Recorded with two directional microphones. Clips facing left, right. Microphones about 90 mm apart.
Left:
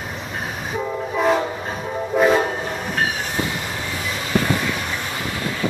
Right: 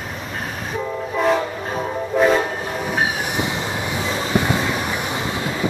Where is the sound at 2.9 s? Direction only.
15° right (ahead or behind).